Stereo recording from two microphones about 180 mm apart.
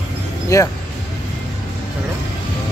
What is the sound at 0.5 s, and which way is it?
Speech, 15° left (ahead or behind).